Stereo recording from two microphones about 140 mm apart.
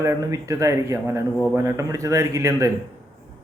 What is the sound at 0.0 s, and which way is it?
A man's voice, 20° right (ahead or behind).